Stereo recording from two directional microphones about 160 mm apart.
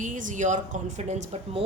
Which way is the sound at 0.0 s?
55° right (ahead or behind).